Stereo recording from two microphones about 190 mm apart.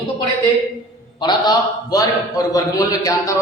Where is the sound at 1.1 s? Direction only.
25° left (ahead or behind).